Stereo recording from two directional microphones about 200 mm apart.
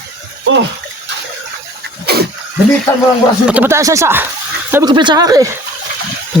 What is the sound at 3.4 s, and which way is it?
Speech, 10° right (ahead or behind).